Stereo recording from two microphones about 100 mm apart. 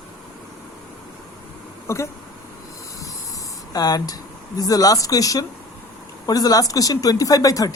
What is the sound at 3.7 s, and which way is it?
Speech, 40° left (ahead or behind).